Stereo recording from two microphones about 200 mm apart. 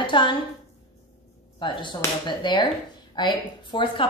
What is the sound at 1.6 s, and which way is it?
Speech, 25° left (ahead or behind).